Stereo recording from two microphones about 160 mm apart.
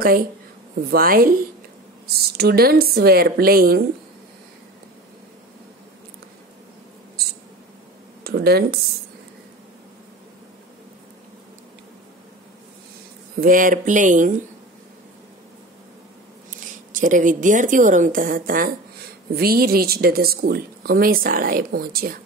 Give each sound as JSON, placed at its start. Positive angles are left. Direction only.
{"t": 0.0, "sound": "speech", "side_deg": -65}
{"t": 2.1, "sound": "speech", "side_deg": -80}
{"t": 8.2, "sound": "speech", "side_deg": -85}
{"t": 13.4, "sound": "speech", "side_deg": -60}
{"t": 16.4, "sound": "a woman's voice", "side_deg": -55}